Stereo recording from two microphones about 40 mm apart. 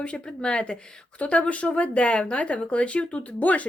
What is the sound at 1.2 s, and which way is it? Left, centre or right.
Speech, left.